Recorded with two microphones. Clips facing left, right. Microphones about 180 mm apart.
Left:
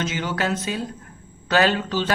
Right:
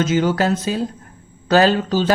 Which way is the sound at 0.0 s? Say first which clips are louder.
Right 8 dB; 45° right (ahead or behind).